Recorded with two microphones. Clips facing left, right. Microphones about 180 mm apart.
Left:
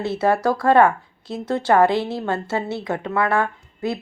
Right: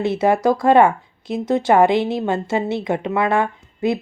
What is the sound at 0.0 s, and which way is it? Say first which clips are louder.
Speech: right 3 dB; 15° right (ahead or behind).